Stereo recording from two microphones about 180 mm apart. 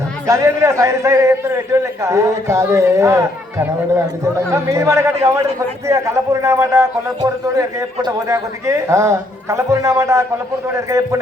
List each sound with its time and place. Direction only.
0.3 s a man's voice: 15° right (ahead or behind)